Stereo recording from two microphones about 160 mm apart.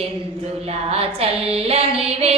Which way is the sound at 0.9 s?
40° right (ahead or behind).